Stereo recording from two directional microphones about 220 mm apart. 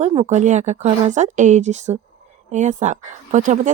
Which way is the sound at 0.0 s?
30° right (ahead or behind).